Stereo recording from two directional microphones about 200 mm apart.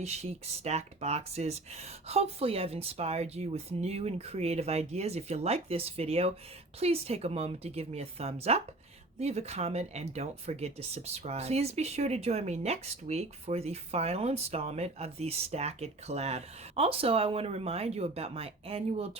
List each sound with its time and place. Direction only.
0.0 s speech: 30° right (ahead or behind)